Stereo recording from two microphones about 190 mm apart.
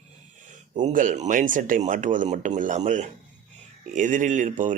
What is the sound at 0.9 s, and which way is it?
Speech, 40° right (ahead or behind).